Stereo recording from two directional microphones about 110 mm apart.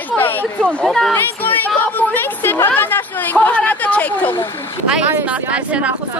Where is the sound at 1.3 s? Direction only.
15° left (ahead or behind).